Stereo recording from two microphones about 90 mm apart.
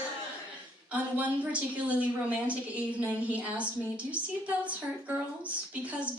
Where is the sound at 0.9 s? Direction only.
15° right (ahead or behind).